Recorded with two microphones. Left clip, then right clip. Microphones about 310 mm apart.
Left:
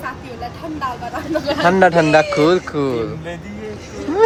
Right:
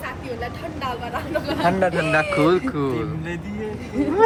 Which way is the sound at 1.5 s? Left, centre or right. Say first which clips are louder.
Left 8 dB; left.